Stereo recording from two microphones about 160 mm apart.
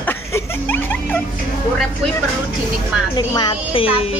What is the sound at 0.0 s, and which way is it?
Music, 10° left (ahead or behind).